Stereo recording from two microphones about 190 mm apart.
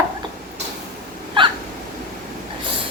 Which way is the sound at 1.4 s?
25° right (ahead or behind).